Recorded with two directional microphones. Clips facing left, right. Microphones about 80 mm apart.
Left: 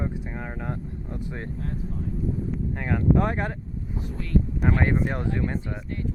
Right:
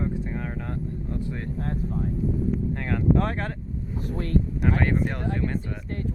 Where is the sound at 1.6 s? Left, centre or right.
Right.